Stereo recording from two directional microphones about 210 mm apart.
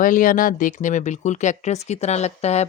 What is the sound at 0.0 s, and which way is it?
Speech, 40° left (ahead or behind).